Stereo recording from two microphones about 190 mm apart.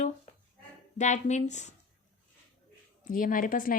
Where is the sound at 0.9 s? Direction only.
40° left (ahead or behind).